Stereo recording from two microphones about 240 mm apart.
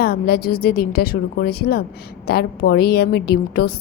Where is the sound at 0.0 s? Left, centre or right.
Left.